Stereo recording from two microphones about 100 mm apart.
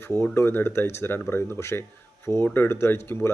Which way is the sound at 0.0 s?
25° left (ahead or behind).